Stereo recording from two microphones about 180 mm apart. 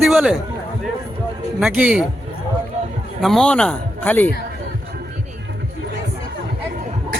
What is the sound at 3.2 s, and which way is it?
Speech, centre (ahead or behind).